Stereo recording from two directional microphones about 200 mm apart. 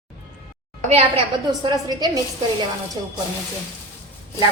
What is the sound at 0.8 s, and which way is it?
Speech, 30° right (ahead or behind).